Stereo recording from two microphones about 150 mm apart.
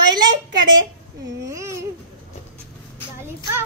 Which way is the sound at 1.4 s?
20° right (ahead or behind).